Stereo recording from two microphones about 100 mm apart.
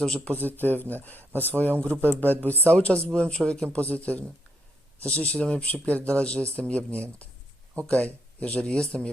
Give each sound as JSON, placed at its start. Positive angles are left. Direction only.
{"t": 0.0, "sound": "speech", "side_deg": 5}
{"t": 0.6, "sound": "speech", "side_deg": 20}